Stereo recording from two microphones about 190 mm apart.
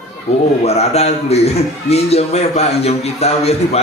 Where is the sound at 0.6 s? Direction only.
35° left (ahead or behind).